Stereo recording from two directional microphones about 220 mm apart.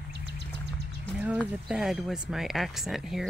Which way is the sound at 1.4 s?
Centre (ahead or behind).